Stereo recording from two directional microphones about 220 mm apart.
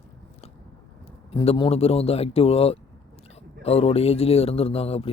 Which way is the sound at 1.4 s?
25° left (ahead or behind).